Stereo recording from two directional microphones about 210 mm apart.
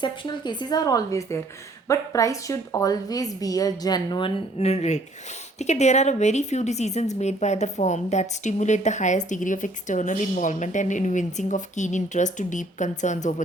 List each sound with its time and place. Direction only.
0.0 s a woman's voice: 20° left (ahead or behind)